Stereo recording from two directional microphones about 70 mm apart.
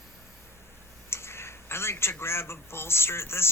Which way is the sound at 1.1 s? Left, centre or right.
Left.